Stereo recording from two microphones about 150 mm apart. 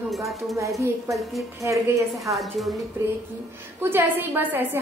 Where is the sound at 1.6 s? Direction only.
15° right (ahead or behind).